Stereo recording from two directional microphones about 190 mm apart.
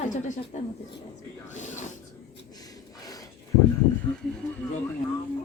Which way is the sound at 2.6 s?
20° left (ahead or behind).